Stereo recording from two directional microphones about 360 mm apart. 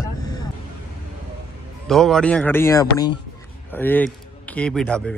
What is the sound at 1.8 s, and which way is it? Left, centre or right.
A man's voice, centre.